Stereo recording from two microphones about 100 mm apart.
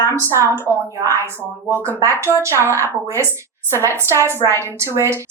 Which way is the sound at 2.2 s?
30° right (ahead or behind).